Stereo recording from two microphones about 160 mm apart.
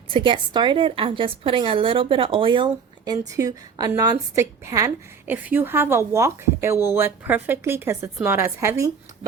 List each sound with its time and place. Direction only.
0.1 s a woman's voice: 30° right (ahead or behind); by 8.9 s 15° right (ahead or behind)